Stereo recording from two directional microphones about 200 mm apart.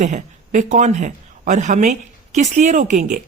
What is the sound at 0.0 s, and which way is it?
A man's voice, 35° right (ahead or behind).